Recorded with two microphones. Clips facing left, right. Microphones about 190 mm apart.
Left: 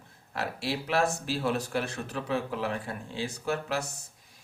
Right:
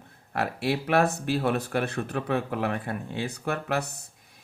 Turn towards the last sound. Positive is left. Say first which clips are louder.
# right 2 dB
turn(degrees=-60)  # may be behind; listen again after turning